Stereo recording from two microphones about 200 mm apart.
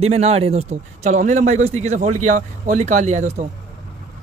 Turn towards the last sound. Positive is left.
turn(degrees=-35)  # may be behind; listen again after turning